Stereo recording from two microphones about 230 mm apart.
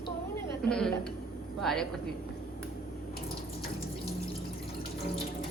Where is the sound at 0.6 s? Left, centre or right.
Centre.